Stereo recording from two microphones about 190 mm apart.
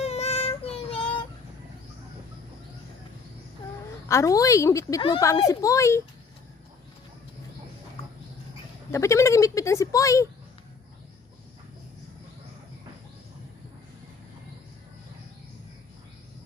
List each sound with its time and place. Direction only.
0.0 s child singing: 35° left (ahead or behind)
4.1 s speech: 15° left (ahead or behind)
8.9 s speech: 15° left (ahead or behind)